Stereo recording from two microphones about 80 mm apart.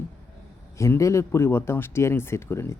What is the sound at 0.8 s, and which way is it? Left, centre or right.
Speech, left.